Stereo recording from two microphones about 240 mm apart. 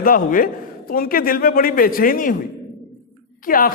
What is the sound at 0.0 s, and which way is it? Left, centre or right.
A man's voice, left.